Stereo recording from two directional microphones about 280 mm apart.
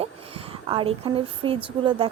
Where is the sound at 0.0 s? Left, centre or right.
Centre.